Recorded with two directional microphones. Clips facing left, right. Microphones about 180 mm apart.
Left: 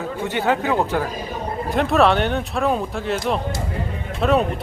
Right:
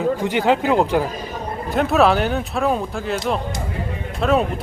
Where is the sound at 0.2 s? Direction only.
15° right (ahead or behind).